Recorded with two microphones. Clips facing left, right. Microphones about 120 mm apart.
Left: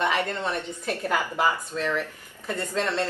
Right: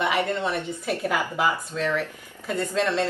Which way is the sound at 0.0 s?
15° right (ahead or behind).